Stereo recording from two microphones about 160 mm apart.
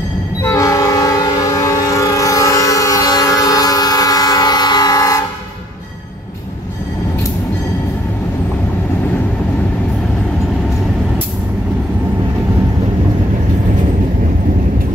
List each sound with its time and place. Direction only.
0.4 s train: 20° left (ahead or behind)